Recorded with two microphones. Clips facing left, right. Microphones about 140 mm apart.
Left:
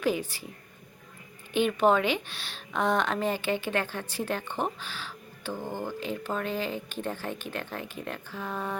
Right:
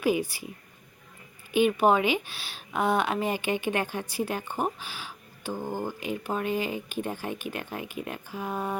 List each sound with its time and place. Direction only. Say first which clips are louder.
0.0 s speech: right 2 dB; 10° right (ahead or behind)
1.5 s speech: right 2 dB; 10° right (ahead or behind)